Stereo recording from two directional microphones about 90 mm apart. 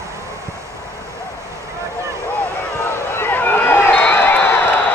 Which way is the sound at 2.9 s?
30° left (ahead or behind).